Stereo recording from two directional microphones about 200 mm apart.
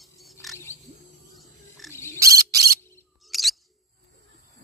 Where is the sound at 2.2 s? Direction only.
15° right (ahead or behind).